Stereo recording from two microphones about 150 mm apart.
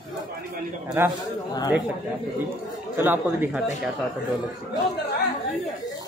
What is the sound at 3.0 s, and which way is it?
Speech, 15° right (ahead or behind).